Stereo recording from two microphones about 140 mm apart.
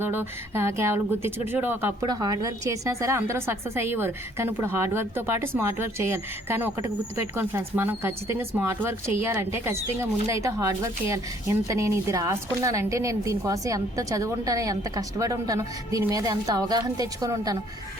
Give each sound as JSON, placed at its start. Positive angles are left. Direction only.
{"t": 0.0, "sound": "a woman's voice", "side_deg": -15}
{"t": 2.0, "sound": "a woman's voice", "side_deg": -30}